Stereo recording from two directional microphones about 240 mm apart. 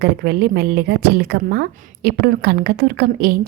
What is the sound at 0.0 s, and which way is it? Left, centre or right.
A woman's voice, right.